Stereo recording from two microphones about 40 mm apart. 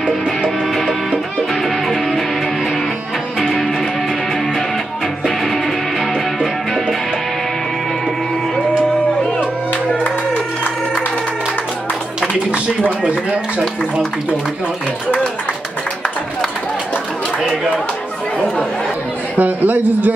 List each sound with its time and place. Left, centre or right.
1.5 s music: centre
3.3 s music: centre
5.2 s music: centre
13.1 s chopping: centre
19.3 s chatter: right